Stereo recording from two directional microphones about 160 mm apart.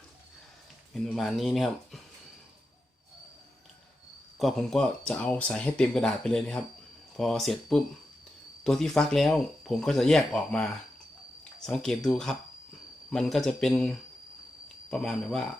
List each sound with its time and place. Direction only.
1.0 s speech: centre (ahead or behind)
4.4 s speech: centre (ahead or behind)